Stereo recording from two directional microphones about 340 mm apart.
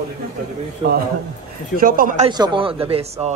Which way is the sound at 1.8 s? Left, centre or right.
Right.